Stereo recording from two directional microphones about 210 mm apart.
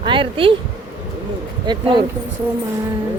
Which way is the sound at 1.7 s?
20° right (ahead or behind).